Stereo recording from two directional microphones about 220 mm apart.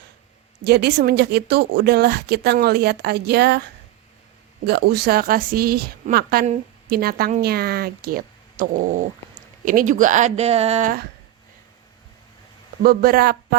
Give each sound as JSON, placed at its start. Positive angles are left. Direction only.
{"t": 0.6, "sound": "a woman's voice", "side_deg": -50}
{"t": 12.8, "sound": "a woman's voice", "side_deg": -45}